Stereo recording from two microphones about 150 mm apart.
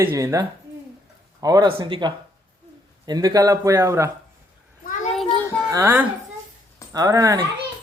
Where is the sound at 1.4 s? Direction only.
25° right (ahead or behind).